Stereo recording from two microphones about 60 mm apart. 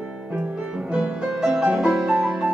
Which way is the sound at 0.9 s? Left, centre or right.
Centre.